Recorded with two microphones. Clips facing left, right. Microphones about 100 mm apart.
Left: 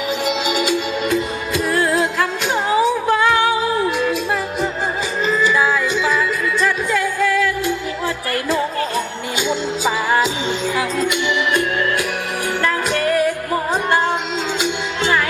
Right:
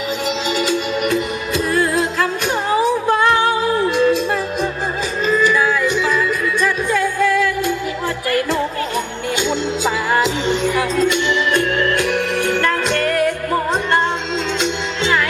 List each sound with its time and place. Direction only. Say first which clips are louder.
0.3 s music: even; 20° left (ahead or behind)
3.8 s music: right 4 dB; 20° left (ahead or behind)
5.2 s music: right 1 dB; 20° left (ahead or behind)
9.4 s music: even; 15° left (ahead or behind)